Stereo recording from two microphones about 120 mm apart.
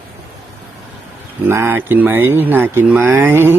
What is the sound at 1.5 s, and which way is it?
Speech, 20° right (ahead or behind).